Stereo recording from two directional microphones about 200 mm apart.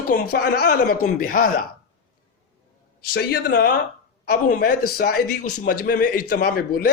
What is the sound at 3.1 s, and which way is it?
Speech, 50° left (ahead or behind).